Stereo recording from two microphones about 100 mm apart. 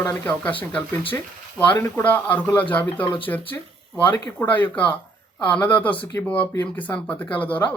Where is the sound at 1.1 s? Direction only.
20° left (ahead or behind).